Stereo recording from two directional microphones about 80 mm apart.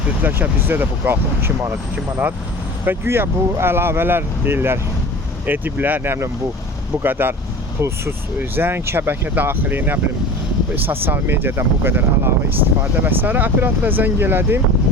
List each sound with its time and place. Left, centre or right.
0.2 s speech: right
2.8 s speech: right